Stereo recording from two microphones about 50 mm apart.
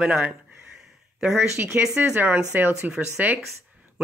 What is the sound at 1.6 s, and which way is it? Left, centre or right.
Speech, centre.